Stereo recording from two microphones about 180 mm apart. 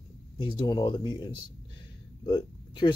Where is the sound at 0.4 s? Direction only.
25° left (ahead or behind).